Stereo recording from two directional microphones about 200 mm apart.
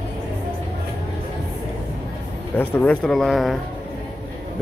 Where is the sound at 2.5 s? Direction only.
10° left (ahead or behind).